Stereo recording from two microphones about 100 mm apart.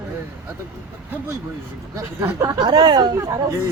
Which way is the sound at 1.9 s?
30° right (ahead or behind).